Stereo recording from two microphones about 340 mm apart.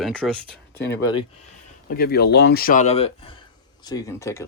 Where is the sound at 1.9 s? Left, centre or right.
Left; by 4.4 s centre.